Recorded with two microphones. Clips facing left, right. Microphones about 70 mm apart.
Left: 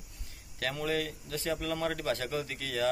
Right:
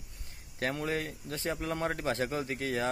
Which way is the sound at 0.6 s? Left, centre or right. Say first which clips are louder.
Even; right.